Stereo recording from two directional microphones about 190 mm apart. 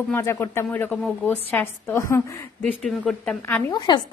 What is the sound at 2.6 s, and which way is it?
A woman's voice, 5° left (ahead or behind).